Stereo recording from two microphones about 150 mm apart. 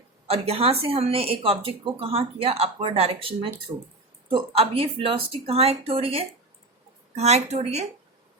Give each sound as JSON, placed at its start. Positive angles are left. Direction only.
{"t": 0.3, "sound": "a woman's voice", "side_deg": -40}